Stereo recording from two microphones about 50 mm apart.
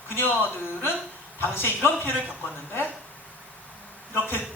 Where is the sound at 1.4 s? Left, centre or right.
Left.